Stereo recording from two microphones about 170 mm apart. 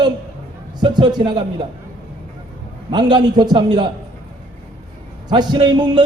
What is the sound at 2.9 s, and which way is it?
Speech, 25° right (ahead or behind).